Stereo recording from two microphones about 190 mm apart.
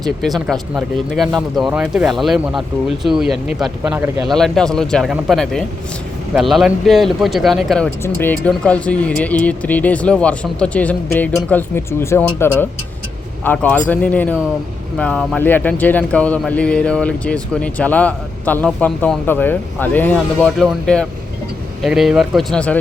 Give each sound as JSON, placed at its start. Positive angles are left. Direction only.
{"t": 0.0, "sound": "speech", "side_deg": 0}
{"t": 4.3, "sound": "speech", "side_deg": 0}